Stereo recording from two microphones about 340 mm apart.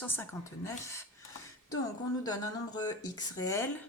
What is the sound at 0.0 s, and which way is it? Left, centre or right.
Speech, centre.